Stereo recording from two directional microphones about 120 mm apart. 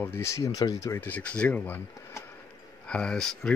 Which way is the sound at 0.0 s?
20° left (ahead or behind).